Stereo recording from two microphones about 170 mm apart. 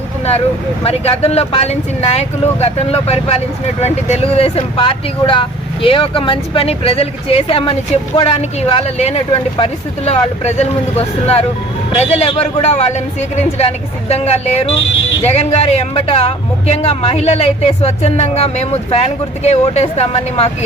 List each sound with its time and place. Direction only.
0.9 s speech: 35° left (ahead or behind)